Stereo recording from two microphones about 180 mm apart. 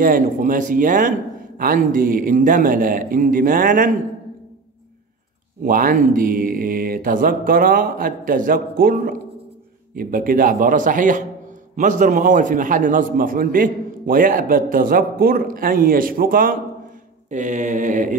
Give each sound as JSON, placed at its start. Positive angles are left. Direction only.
{"t": 0.0, "sound": "a man's voice", "side_deg": -50}
{"t": 5.6, "sound": "a man's voice", "side_deg": -50}